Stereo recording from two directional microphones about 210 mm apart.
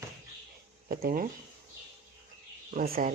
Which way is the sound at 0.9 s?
45° right (ahead or behind).